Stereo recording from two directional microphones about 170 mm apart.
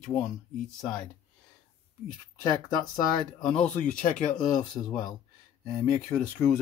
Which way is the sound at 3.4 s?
5° left (ahead or behind).